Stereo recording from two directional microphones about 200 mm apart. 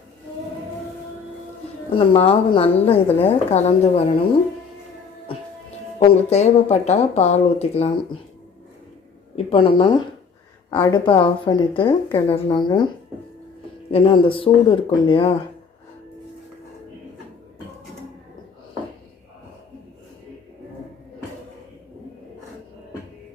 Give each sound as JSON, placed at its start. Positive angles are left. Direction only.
{"t": 1.9, "sound": "speech", "side_deg": 30}
{"t": 6.0, "sound": "speech", "side_deg": 35}
{"t": 9.3, "sound": "speech", "side_deg": 25}
{"t": 10.7, "sound": "speech", "side_deg": 15}
{"t": 13.9, "sound": "speech", "side_deg": 25}